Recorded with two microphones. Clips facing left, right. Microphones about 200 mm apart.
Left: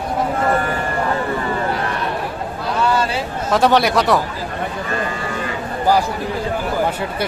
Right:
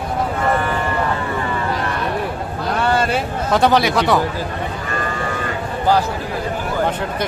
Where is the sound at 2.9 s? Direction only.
55° right (ahead or behind).